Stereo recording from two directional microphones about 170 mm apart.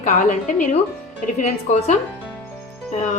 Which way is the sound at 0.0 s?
45° left (ahead or behind).